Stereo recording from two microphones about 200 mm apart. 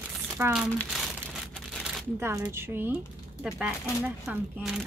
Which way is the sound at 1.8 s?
10° right (ahead or behind).